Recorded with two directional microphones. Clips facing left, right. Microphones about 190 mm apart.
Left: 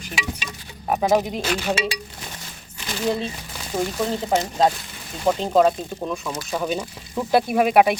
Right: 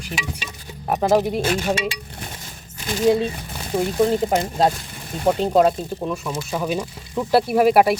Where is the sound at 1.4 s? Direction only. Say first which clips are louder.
Right 3 dB; 50° right (ahead or behind).